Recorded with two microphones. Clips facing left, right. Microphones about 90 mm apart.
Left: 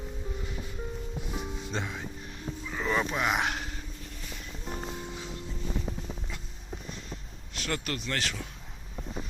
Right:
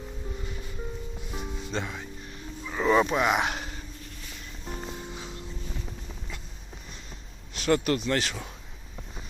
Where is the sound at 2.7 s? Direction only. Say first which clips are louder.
Right 7 dB; 10° right (ahead or behind).